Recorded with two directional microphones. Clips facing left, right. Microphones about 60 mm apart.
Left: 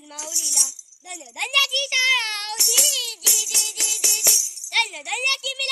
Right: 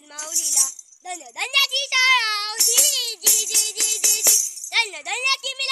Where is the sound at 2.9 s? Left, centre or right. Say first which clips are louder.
Even; right.